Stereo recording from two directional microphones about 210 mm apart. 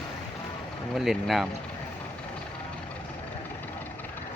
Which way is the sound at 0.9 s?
Centre (ahead or behind).